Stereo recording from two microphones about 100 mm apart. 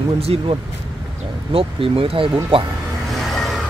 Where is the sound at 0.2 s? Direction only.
90° right.